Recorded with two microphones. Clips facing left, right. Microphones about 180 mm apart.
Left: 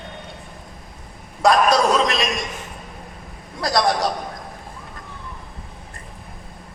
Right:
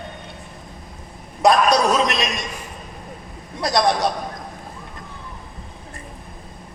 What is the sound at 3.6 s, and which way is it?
Speech, centre (ahead or behind).